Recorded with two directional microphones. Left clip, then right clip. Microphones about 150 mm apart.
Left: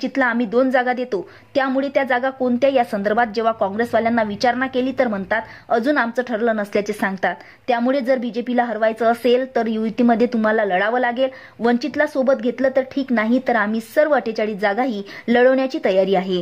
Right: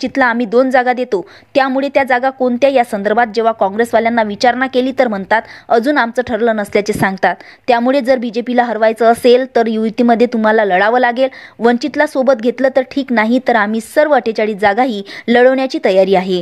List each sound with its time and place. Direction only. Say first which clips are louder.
0.0 s a woman's voice: right 6 dB; 30° right (ahead or behind)